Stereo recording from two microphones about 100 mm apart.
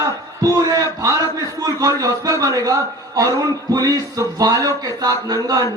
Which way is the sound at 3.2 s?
35° right (ahead or behind).